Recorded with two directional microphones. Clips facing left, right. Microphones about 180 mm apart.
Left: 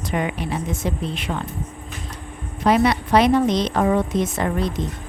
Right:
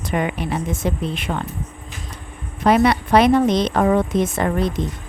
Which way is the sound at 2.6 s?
55° right (ahead or behind).